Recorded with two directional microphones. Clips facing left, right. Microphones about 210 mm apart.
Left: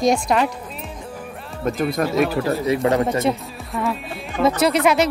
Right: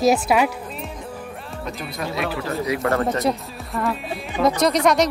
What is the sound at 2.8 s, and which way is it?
Speech, 15° left (ahead or behind).